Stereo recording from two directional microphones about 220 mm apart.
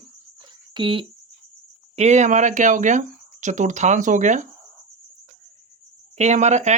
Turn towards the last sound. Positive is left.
turn(degrees=-30)  # may be behind; listen again after turning